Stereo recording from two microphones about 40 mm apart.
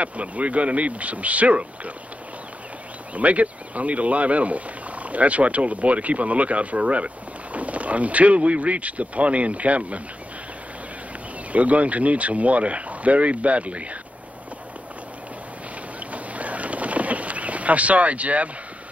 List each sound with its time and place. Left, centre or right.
0.0 s speech: right
3.2 s speech: right
11.5 s speech: right
16.0 s boat: right